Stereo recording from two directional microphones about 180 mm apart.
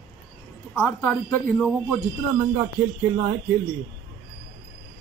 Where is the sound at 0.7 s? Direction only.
10° left (ahead or behind).